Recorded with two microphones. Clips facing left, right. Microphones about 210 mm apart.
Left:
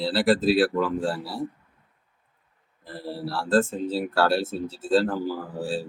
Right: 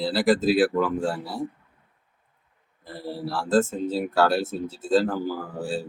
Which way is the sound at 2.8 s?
Centre (ahead or behind).